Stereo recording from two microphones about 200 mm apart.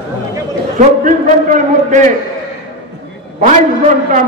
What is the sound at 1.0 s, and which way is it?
A man's voice, 40° right (ahead or behind).